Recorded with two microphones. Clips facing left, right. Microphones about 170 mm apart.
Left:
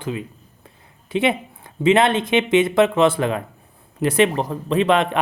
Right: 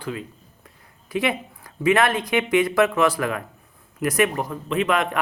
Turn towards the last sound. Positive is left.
turn(degrees=30)  # may be behind; listen again after turning